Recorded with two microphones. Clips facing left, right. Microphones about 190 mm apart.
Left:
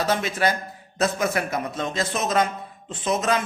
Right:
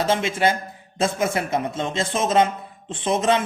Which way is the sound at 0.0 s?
25° right (ahead or behind).